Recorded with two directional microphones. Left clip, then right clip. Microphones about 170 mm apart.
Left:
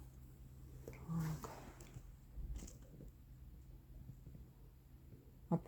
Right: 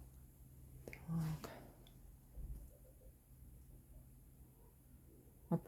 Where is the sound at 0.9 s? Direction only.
30° right (ahead or behind).